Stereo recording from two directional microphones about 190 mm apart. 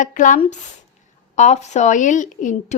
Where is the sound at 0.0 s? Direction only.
45° left (ahead or behind).